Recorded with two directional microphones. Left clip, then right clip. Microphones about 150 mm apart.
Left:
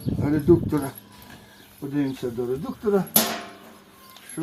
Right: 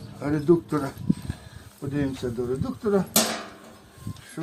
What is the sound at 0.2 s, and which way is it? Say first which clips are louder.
Speech: left 2 dB; centre (ahead or behind).